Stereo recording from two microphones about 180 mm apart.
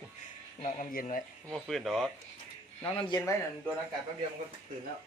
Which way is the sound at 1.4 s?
Centre (ahead or behind).